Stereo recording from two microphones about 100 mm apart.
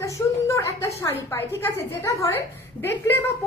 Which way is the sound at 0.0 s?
30° left (ahead or behind).